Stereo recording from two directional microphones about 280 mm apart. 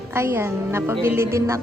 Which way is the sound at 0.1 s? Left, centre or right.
Centre.